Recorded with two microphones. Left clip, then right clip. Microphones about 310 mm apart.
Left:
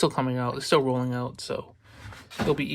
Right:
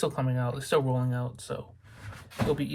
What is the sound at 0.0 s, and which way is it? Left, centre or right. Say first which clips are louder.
Speech: left 5 dB; left.